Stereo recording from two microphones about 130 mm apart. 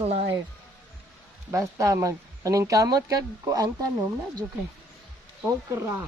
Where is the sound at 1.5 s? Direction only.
25° right (ahead or behind).